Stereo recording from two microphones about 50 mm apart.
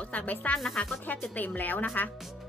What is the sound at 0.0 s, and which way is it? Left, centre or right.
Music, left.